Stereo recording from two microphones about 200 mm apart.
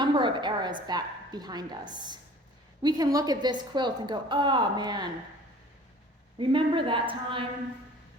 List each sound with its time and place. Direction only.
0.0 s a woman's voice: 25° right (ahead or behind)
6.4 s a woman's voice: 25° right (ahead or behind)